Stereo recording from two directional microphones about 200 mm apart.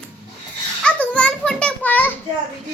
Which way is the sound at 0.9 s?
5° left (ahead or behind).